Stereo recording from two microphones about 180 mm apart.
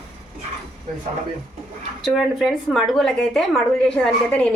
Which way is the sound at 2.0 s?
Centre (ahead or behind).